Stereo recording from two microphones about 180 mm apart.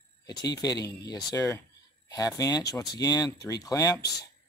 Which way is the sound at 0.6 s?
20° left (ahead or behind).